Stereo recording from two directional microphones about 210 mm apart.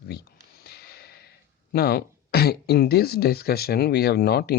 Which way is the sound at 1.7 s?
50° left (ahead or behind).